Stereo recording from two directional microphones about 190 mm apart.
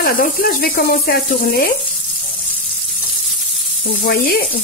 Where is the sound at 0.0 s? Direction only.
50° left (ahead or behind).